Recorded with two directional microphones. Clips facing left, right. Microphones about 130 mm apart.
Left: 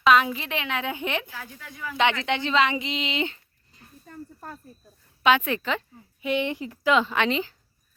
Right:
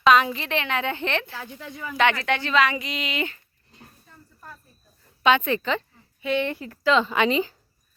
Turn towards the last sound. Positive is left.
turn(degrees=0)  # may be behind; listen again after turning